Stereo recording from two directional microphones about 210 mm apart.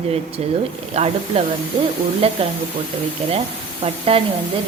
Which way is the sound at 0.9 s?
30° right (ahead or behind).